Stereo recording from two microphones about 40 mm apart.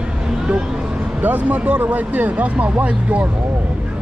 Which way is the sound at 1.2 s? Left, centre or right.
Right.